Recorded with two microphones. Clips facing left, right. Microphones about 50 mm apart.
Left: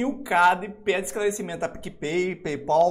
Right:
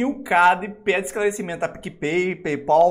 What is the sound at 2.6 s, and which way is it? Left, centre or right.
Speech, centre.